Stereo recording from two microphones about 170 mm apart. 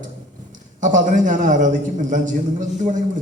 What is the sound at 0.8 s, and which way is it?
A man's voice, 50° right (ahead or behind).